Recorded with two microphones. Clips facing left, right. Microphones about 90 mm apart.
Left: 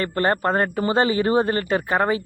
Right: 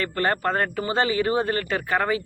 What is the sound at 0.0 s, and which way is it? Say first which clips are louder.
Speech: left 3 dB; 30° left (ahead or behind).